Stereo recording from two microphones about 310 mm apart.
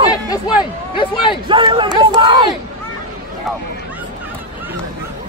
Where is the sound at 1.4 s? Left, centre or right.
Centre.